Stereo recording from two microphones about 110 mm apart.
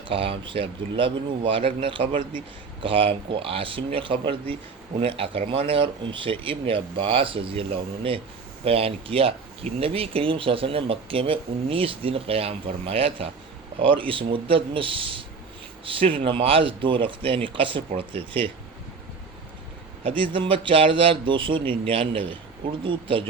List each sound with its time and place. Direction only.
0.1 s speech: 55° right (ahead or behind)
20.3 s speech: 50° right (ahead or behind)